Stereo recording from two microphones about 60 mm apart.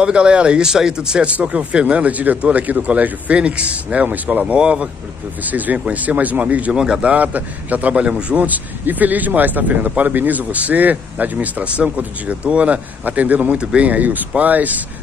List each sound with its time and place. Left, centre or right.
0.0 s speech: centre
5.4 s speech: right
6.7 s speech: centre; by 14.8 s right